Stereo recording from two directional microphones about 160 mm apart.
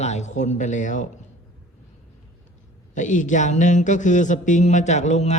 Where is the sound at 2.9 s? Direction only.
50° left (ahead or behind).